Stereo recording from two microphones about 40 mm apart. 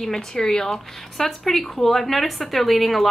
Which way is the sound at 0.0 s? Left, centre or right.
Centre.